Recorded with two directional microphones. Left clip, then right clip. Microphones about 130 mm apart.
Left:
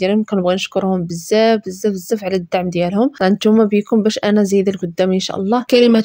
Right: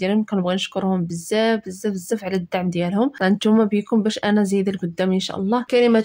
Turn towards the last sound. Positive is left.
turn(degrees=65)  # may be behind; listen again after turning